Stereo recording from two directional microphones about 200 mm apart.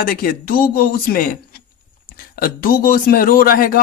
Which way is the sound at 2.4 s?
45° left (ahead or behind).